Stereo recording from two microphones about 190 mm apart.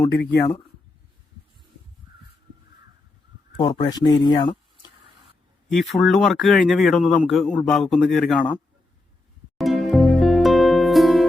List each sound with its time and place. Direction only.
3.6 s speech: 25° left (ahead or behind)
5.6 s speech: centre (ahead or behind)
9.6 s music: centre (ahead or behind)